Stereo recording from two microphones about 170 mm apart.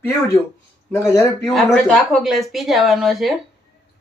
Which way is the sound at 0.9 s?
15° left (ahead or behind).